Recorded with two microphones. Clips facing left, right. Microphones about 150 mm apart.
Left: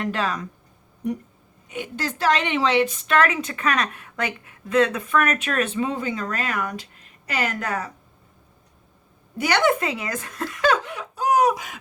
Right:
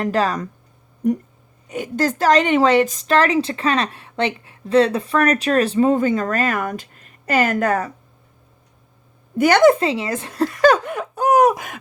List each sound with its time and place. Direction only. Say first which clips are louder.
0.0 s a woman's voice: right 6 dB; 40° right (ahead or behind)
1.7 s a woman's voice: right 8 dB; 40° right (ahead or behind)
9.4 s a woman's voice: right 8 dB; 45° right (ahead or behind)
9.7 s giggle: right 6 dB; 30° right (ahead or behind); by 11.8 s 50° right (ahead or behind)